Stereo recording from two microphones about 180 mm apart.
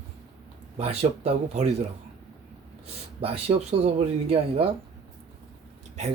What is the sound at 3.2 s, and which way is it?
Speech, 35° right (ahead or behind).